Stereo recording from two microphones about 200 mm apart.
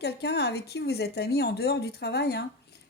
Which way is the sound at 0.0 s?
55° left (ahead or behind).